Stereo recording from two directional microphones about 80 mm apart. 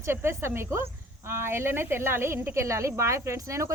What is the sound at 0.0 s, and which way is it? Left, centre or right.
Speech, right.